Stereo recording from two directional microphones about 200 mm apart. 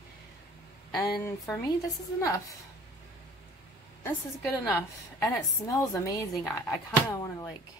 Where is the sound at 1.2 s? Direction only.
15° left (ahead or behind).